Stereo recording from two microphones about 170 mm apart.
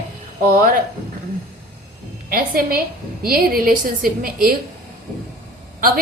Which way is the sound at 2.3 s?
55° right (ahead or behind).